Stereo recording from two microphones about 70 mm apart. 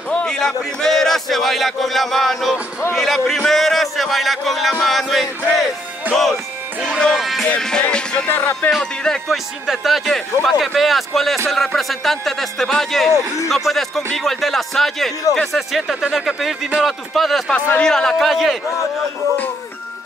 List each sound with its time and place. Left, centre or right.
0.1 s a man's voice: centre
6.0 s music: right
6.8 s speech: centre
7.1 s a man's voice: centre
7.4 s a man's voice: centre